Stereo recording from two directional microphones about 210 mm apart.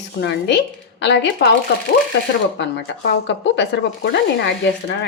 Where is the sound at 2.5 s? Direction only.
55° left (ahead or behind).